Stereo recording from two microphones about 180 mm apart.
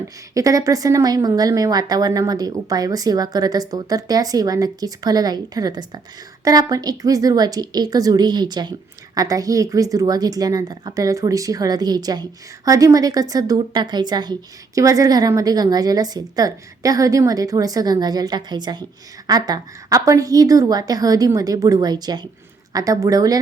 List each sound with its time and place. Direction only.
0.3 s a woman's voice: 20° right (ahead or behind)